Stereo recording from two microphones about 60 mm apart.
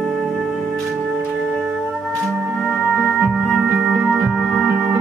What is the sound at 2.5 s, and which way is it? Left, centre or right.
Music, centre.